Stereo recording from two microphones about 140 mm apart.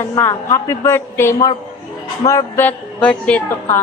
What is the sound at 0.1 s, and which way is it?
A woman's voice, 25° left (ahead or behind).